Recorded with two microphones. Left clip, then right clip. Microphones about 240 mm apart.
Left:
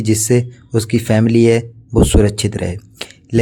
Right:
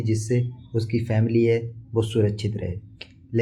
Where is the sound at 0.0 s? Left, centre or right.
Left.